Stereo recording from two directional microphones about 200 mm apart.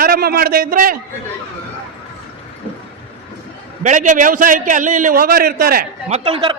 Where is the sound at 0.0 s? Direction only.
50° right (ahead or behind).